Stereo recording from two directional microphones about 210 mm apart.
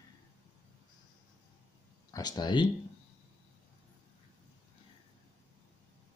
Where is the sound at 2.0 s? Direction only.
20° left (ahead or behind).